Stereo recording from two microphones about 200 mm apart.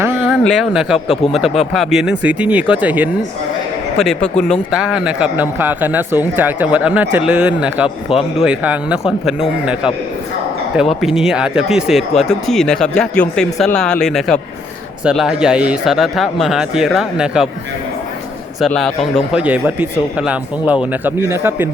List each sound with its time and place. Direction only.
0.0 s a sound: 10° right (ahead or behind)
0.4 s speech: centre (ahead or behind)
8.1 s speech: 25° left (ahead or behind)
8.4 s speech: 5° right (ahead or behind)
11.0 s speech: centre (ahead or behind)
18.6 s speech: centre (ahead or behind)